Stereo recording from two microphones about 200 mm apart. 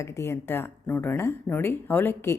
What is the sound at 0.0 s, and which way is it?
A woman's voice, 15° left (ahead or behind).